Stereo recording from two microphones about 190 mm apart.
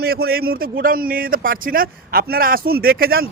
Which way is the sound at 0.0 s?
55° right (ahead or behind).